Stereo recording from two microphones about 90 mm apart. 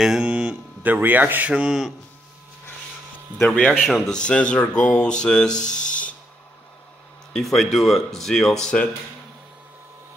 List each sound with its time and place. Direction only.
0.0 s a sound: 5° right (ahead or behind)
0.8 s speech: 20° right (ahead or behind)
1.5 s speech: 10° right (ahead or behind)
3.3 s speech: 10° left (ahead or behind)
4.2 s speech: 10° left (ahead or behind)
7.3 s speech: centre (ahead or behind)